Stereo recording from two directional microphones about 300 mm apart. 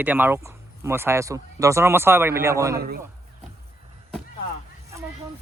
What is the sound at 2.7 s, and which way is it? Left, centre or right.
Speech, right.